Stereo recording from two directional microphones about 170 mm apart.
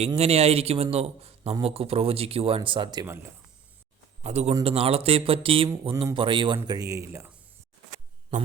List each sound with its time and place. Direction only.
0.2 s a man's voice: 40° right (ahead or behind)
4.2 s a man's voice: 40° right (ahead or behind); by 7.3 s 15° right (ahead or behind)
8.3 s speech: 45° right (ahead or behind)